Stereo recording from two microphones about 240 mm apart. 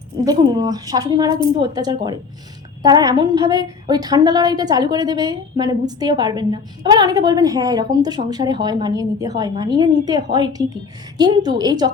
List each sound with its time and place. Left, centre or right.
0.3 s a woman's voice: centre